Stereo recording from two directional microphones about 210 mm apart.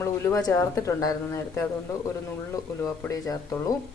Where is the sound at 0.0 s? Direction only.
15° left (ahead or behind).